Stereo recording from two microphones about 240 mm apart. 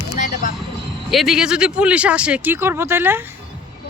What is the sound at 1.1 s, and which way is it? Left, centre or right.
Speech, centre.